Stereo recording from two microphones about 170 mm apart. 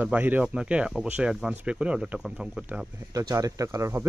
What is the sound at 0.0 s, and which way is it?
Speech, 10° right (ahead or behind).